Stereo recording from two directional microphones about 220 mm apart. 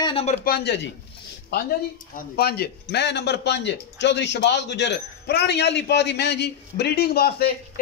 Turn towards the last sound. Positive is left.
turn(degrees=45)  # may be behind; listen again after turning